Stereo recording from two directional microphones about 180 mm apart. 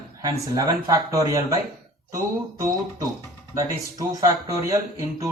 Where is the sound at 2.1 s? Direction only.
20° right (ahead or behind).